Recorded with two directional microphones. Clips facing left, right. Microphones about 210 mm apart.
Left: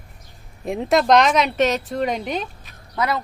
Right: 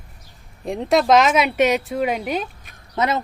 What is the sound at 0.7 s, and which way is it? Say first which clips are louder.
Speech: even; centre (ahead or behind).